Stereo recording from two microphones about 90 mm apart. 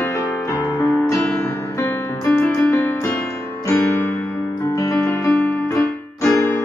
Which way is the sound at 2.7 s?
30° left (ahead or behind).